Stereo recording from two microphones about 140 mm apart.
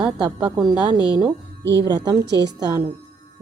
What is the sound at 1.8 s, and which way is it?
Speech, 30° right (ahead or behind).